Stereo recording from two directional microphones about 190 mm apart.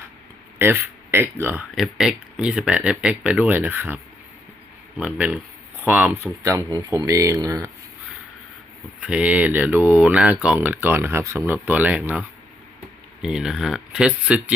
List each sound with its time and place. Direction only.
0.6 s speech: 10° right (ahead or behind)
1.7 s speech: centre (ahead or behind)
6.4 s speech: 15° right (ahead or behind)
9.0 s speech: 5° right (ahead or behind)
13.2 s speech: 5° right (ahead or behind)